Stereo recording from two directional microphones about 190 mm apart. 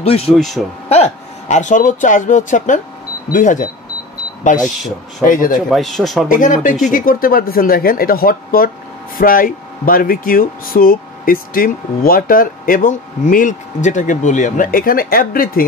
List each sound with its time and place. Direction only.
0.0 s speech: 30° left (ahead or behind)
0.3 s speech: centre (ahead or behind)
1.5 s speech: 40° left (ahead or behind)
5.7 s speech: centre (ahead or behind)
6.2 s speech: 45° left (ahead or behind)